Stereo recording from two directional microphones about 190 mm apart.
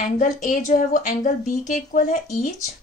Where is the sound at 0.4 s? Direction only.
40° left (ahead or behind).